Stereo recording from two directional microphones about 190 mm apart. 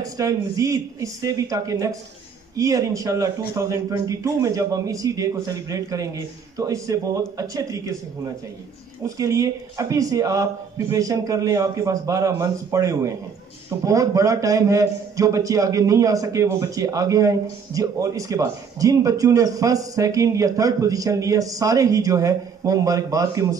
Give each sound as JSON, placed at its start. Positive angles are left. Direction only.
{"t": 0.0, "sound": "a man's voice", "side_deg": -15}
{"t": 9.0, "sound": "a man's voice", "side_deg": -15}